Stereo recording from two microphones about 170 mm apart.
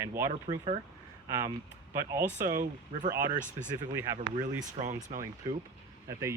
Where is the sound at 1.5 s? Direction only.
15° right (ahead or behind).